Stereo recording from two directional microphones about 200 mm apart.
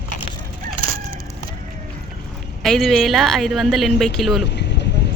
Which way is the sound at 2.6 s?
Centre (ahead or behind).